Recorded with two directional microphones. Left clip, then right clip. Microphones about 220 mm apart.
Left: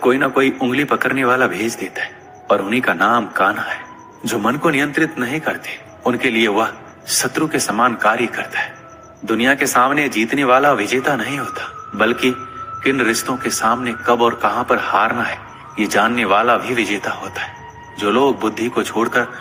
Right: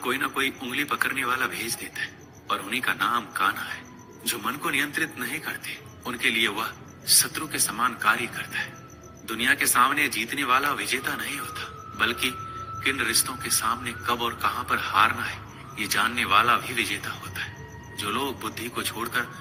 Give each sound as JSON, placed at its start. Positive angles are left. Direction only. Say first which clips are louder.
{"t": 0.0, "sound": "speech", "louder": "left 11 dB", "side_deg": -20}